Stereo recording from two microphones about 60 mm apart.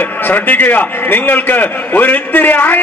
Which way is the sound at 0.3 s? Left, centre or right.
Left.